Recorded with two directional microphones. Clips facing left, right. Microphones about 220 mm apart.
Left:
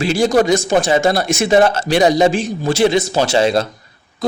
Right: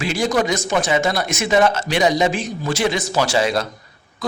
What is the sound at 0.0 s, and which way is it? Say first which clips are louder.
Speech: left 6 dB; 30° left (ahead or behind).